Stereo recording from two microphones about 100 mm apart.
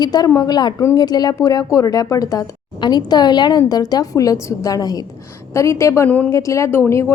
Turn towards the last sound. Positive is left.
turn(degrees=25)  # may be behind; listen again after turning